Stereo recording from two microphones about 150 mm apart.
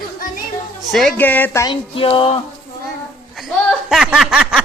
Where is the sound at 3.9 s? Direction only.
Centre (ahead or behind).